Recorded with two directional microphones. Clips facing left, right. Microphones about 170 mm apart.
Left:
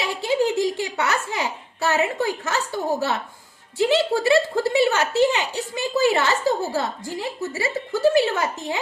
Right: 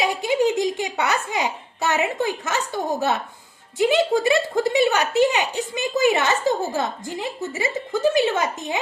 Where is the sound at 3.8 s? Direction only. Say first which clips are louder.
Right 1 dB; 20° right (ahead or behind).